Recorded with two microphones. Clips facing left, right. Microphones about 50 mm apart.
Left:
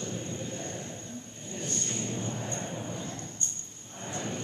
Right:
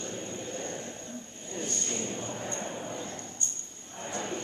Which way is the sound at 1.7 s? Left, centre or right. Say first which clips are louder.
Left 2 dB; centre.